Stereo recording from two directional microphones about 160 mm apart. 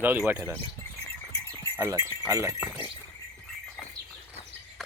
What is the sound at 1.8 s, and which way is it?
Speech, 15° right (ahead or behind).